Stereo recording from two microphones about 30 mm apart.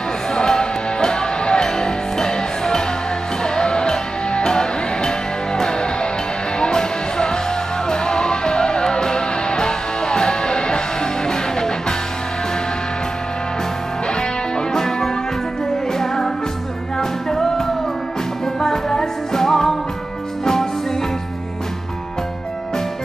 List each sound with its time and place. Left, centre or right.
0.3 s music: left
14.7 s music: centre
17.3 s music: centre